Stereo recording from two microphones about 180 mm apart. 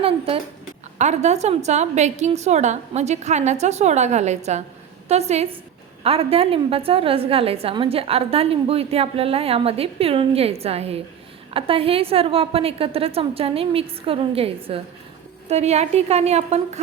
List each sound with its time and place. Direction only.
0.9 s a woman's voice: 40° right (ahead or behind)